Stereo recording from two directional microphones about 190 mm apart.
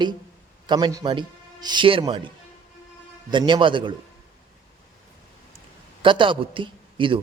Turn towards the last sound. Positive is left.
turn(degrees=-25)  # may be behind; listen again after turning